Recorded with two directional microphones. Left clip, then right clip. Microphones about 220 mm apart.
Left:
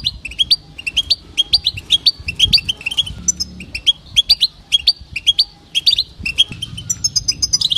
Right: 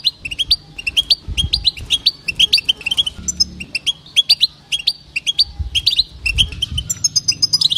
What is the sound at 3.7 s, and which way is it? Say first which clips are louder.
Bird: left 5 dB; 15° left (ahead or behind).